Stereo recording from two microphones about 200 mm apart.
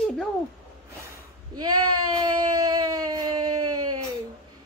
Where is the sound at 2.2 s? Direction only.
20° right (ahead or behind).